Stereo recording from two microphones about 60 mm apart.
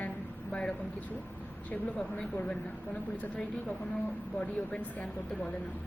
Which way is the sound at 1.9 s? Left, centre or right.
Centre.